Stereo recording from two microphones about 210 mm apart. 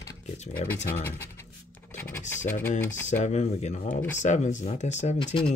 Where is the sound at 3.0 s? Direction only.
35° left (ahead or behind).